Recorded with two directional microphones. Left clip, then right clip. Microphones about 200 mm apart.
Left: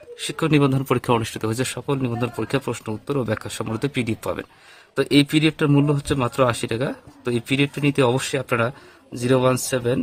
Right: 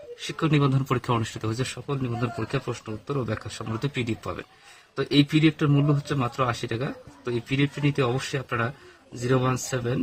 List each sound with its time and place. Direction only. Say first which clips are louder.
0.2 s speech: left 5 dB; 45° left (ahead or behind)